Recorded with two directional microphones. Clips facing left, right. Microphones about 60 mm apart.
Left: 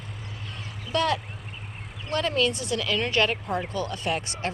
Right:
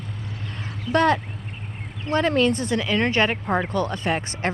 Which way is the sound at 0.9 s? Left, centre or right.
Right.